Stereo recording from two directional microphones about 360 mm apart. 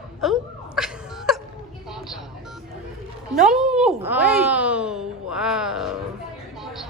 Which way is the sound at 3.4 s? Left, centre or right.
Centre.